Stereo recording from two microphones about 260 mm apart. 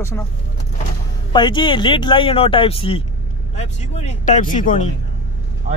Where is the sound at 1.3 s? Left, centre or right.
Centre.